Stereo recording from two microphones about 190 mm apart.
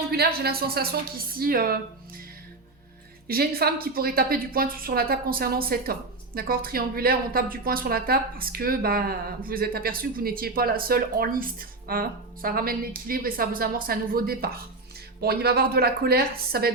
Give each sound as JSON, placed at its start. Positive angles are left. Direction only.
{"t": 0.1, "sound": "a woman's voice", "side_deg": -55}
{"t": 3.2, "sound": "a woman's voice", "side_deg": -55}